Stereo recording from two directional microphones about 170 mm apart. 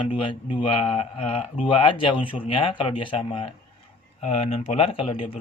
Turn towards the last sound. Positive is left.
turn(degrees=35)  # may be behind; listen again after turning